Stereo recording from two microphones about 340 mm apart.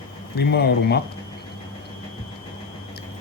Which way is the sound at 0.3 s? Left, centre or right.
Left.